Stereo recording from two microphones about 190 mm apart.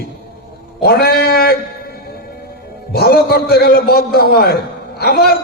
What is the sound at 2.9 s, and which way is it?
A man's voice, 55° left (ahead or behind).